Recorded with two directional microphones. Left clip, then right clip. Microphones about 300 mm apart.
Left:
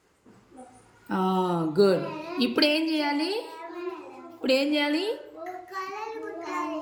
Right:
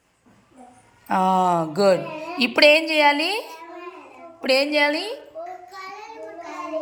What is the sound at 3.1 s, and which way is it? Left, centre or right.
Speech, centre.